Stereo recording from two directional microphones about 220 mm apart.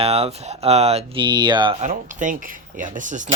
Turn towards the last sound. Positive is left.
turn(degrees=-35)  # may be behind; listen again after turning